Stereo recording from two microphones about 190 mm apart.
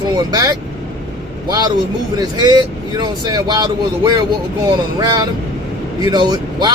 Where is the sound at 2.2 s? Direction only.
20° right (ahead or behind).